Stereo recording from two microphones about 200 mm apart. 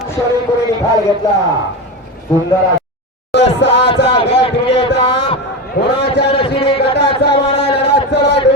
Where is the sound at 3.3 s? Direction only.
60° left (ahead or behind).